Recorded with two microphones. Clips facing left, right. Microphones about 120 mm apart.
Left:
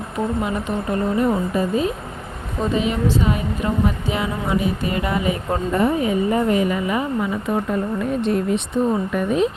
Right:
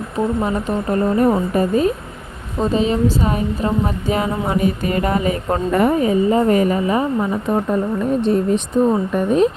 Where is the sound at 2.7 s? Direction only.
35° right (ahead or behind).